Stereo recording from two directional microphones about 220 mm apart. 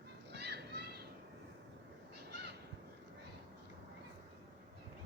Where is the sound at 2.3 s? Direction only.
50° right (ahead or behind).